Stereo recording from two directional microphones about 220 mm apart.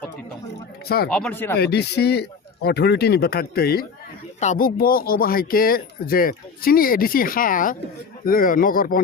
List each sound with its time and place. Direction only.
0.9 s speech: 45° left (ahead or behind)
1.1 s speech: 5° left (ahead or behind)
1.5 s speech: 50° left (ahead or behind)